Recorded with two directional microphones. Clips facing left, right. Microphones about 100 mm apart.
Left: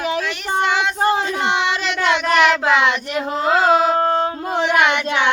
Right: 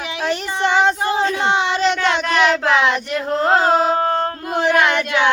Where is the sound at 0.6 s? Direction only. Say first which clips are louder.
Right 4 dB; 35° right (ahead or behind).